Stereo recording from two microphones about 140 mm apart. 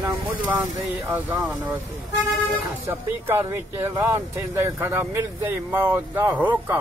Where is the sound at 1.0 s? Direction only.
15° right (ahead or behind).